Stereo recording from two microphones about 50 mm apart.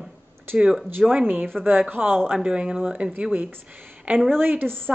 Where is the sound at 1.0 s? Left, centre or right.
Centre.